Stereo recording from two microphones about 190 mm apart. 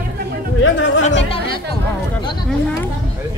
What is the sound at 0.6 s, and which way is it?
Speech, 90° left.